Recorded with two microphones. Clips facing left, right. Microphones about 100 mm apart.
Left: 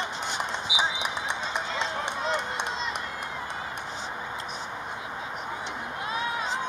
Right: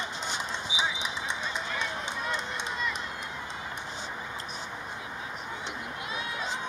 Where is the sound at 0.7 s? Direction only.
60° left (ahead or behind).